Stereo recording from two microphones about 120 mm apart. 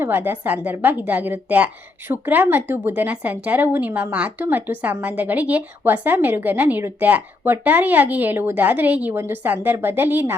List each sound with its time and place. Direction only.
0.0 s a woman's voice: 15° right (ahead or behind)